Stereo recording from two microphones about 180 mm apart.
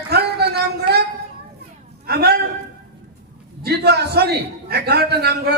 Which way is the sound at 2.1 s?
60° right (ahead or behind).